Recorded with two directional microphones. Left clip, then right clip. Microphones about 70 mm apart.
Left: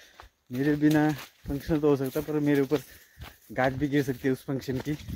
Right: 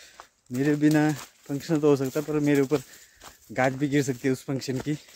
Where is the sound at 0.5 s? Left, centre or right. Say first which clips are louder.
Right 2 dB; right.